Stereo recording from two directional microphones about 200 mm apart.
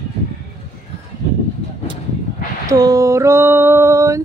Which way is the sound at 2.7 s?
15° right (ahead or behind).